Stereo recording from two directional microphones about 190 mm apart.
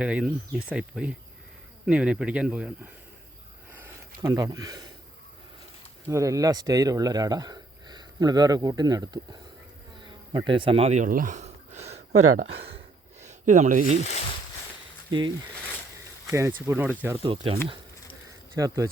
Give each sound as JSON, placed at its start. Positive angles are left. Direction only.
{"t": 0.0, "sound": "speech", "side_deg": -5}
{"t": 3.7, "sound": "a sound", "side_deg": -10}
{"t": 6.1, "sound": "speech", "side_deg": -15}
{"t": 10.0, "sound": "a sound", "side_deg": -25}
{"t": 13.2, "sound": "speech", "side_deg": -40}
{"t": 16.3, "sound": "speech", "side_deg": -10}
{"t": 17.2, "sound": "speech", "side_deg": -25}